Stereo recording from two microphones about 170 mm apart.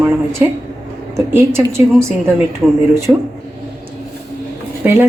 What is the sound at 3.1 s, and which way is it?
Speech, 15° right (ahead or behind).